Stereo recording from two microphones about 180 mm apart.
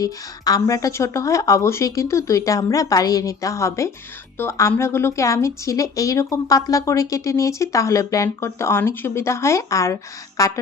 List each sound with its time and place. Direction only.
0.0 s speech: 20° left (ahead or behind)